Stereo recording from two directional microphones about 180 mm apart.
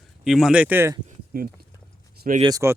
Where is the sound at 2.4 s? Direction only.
20° right (ahead or behind).